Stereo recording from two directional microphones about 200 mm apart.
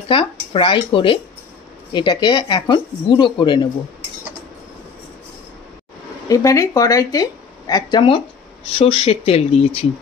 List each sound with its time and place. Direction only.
0.1 s speech: 25° left (ahead or behind)
6.2 s a woman's voice: 15° left (ahead or behind)